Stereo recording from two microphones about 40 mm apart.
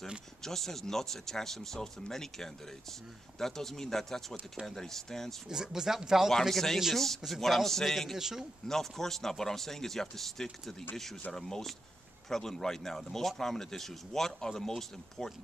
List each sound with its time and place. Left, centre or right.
0.4 s speech: centre
5.5 s speech: centre
6.5 s speech: centre
8.2 s speech: centre
8.6 s speech: centre